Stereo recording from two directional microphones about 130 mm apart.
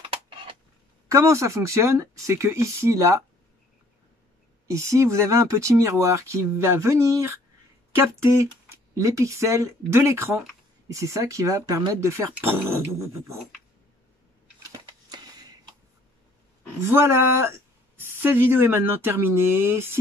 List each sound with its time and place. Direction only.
0.1 s a sound: 40° right (ahead or behind)
1.0 s speech: 25° right (ahead or behind)
4.6 s speech: 20° right (ahead or behind)
16.8 s speech: 20° right (ahead or behind)